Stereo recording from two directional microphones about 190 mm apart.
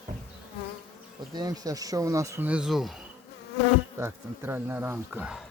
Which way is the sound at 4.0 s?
10° right (ahead or behind).